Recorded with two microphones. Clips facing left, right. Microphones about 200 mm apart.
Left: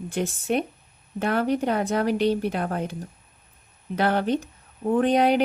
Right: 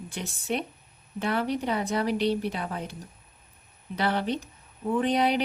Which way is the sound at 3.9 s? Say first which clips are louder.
Left 5 dB; 50° left (ahead or behind).